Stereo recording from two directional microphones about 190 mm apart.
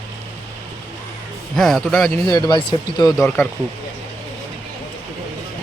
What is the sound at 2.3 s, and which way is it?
Speech, 25° left (ahead or behind).